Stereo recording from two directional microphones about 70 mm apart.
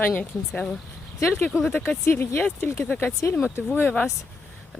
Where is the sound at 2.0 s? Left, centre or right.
Left.